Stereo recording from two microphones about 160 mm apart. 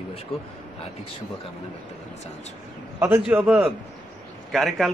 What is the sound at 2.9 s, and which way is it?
A man's voice, 10° right (ahead or behind).